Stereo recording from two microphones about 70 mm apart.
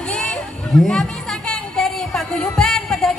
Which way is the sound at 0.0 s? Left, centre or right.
Centre.